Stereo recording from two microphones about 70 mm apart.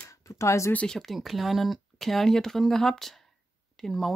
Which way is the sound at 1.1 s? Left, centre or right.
Centre.